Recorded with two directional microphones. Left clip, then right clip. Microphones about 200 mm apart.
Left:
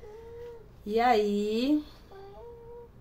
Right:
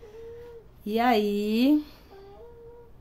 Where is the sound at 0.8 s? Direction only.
50° right (ahead or behind).